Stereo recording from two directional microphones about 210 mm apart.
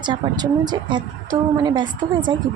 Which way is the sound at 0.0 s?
20° right (ahead or behind).